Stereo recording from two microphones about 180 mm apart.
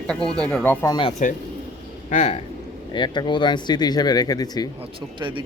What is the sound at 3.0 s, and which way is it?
Speech, 25° left (ahead or behind).